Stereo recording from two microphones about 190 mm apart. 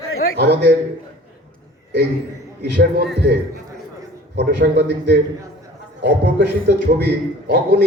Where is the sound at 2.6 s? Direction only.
60° right (ahead or behind).